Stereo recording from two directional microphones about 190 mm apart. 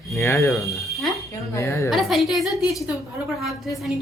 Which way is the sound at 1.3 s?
15° left (ahead or behind).